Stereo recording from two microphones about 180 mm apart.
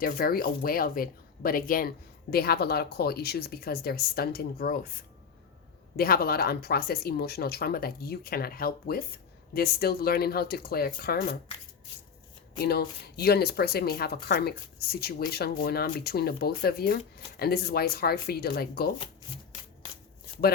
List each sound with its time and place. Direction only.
0.0 s speech: 55° left (ahead or behind)
12.5 s speech: 60° left (ahead or behind)